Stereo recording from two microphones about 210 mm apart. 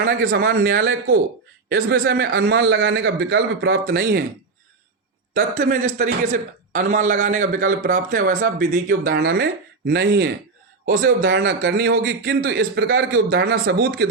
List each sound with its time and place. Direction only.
0.0 s a man's voice: 50° right (ahead or behind)
5.3 s a man's voice: 40° right (ahead or behind)